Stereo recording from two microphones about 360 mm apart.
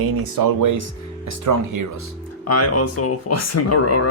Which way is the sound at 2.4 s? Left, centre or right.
Left.